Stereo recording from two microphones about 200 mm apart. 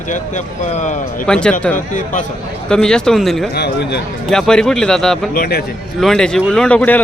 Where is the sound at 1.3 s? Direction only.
5° left (ahead or behind).